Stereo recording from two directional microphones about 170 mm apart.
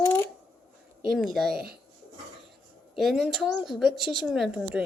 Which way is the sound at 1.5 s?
65° right (ahead or behind).